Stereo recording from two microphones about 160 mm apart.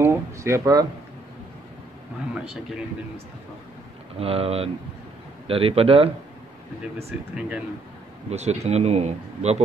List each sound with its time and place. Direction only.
0.0 s a sound: 15° right (ahead or behind)
4.2 s speech: 35° right (ahead or behind)
7.1 s speech: 5° right (ahead or behind)
8.3 s speech: 45° right (ahead or behind)